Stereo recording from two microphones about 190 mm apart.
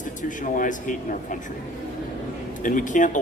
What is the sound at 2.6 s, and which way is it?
Speech, 45° left (ahead or behind).